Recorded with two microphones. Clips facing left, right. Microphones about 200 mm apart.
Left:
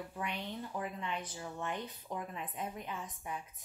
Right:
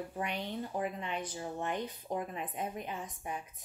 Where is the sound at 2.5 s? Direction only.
25° right (ahead or behind).